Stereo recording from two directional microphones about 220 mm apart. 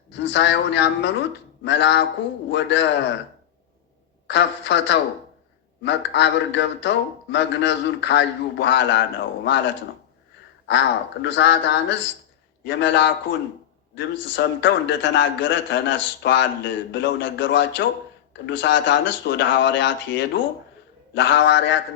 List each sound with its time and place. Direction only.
0.1 s a man's voice: 55° left (ahead or behind)
4.3 s a man's voice: 55° left (ahead or behind)